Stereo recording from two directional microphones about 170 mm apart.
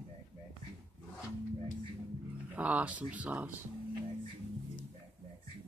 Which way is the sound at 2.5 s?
10° right (ahead or behind).